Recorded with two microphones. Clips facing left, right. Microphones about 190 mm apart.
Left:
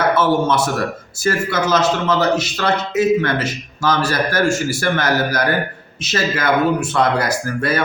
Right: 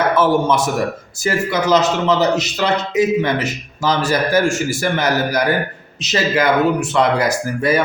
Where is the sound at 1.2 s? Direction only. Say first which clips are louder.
Even; 15° right (ahead or behind).